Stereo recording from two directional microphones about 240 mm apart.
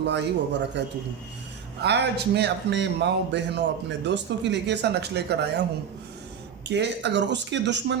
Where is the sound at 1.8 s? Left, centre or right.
Right.